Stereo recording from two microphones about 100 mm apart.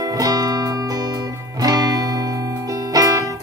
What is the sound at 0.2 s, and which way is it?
Music, 40° right (ahead or behind).